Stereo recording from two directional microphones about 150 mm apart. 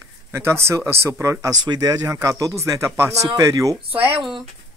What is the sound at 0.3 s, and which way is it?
Speech, 15° right (ahead or behind).